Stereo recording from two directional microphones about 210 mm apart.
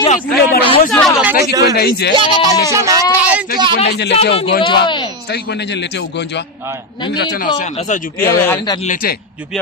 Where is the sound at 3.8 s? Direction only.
55° left (ahead or behind).